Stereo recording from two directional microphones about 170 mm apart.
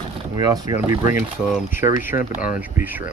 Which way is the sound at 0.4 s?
25° right (ahead or behind).